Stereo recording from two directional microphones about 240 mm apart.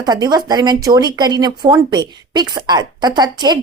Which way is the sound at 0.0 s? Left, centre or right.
Centre.